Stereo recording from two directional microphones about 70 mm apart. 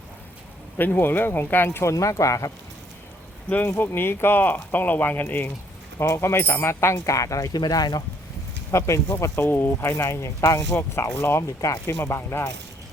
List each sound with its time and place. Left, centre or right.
0.8 s speech: left
1.9 s speech: left
3.5 s speech: left
6.0 s speech: left
8.7 s speech: left
11.4 s speech: left
12.0 s speech: left